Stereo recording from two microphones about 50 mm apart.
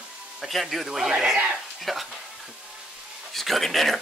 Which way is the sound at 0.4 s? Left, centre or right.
Centre.